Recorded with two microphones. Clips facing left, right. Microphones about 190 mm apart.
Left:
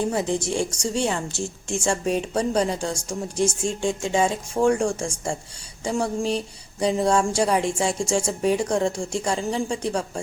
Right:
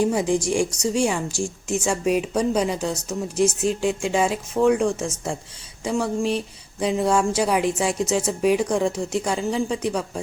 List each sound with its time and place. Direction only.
0.0 s speech: 15° right (ahead or behind)
1.3 s a woman's voice: 25° left (ahead or behind)
1.7 s speech: 5° right (ahead or behind)
3.3 s speech: 30° left (ahead or behind)
3.7 s speech: 5° right (ahead or behind)
4.6 s speech: 5° left (ahead or behind)
4.9 s speech: 5° right (ahead or behind)